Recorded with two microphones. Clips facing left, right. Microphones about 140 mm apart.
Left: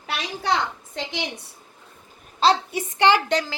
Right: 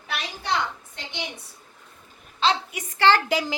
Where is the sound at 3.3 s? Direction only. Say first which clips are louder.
Left 1 dB; 10° right (ahead or behind).